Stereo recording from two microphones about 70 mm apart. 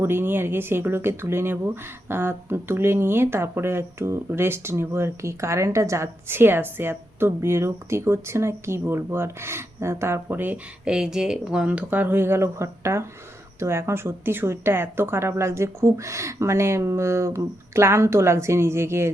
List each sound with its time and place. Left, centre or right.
0.0 s speech: right
10.8 s speech: centre; by 19.1 s right